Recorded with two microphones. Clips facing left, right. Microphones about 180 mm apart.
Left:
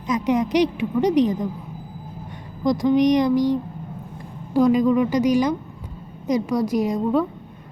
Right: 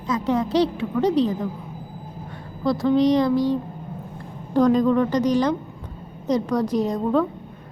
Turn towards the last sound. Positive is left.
turn(degrees=10)  # may be behind; listen again after turning